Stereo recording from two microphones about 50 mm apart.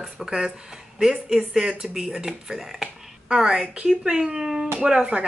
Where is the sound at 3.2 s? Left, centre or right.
Centre.